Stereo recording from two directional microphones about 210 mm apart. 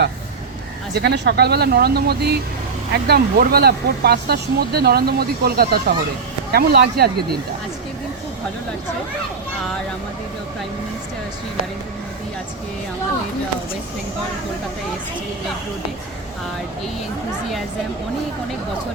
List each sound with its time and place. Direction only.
0.9 s speech: 55° right (ahead or behind)